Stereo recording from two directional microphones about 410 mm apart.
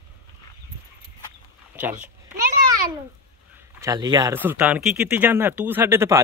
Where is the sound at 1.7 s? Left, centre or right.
Centre.